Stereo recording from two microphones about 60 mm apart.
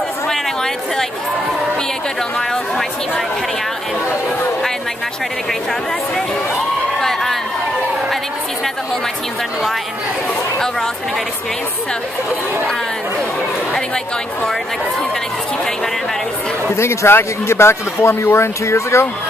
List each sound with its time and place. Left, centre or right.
7.0 s speech: centre
16.7 s a man's voice: left